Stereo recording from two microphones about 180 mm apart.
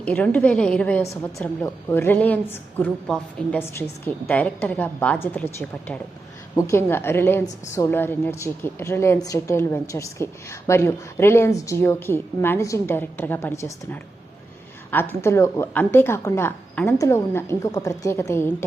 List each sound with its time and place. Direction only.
0.0 s a woman's voice: 10° left (ahead or behind)